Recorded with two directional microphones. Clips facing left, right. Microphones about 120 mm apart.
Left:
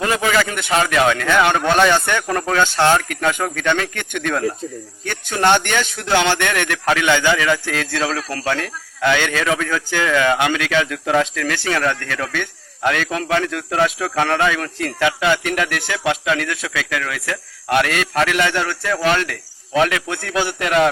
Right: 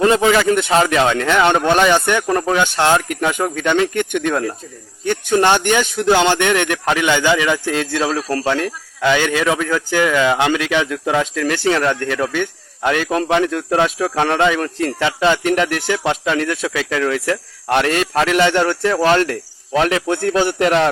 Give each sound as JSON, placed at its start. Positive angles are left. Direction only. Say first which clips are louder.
{"t": 0.0, "sound": "speech", "louder": "right 5 dB", "side_deg": -25}
{"t": 13.1, "sound": "speech", "louder": "right 4 dB", "side_deg": -30}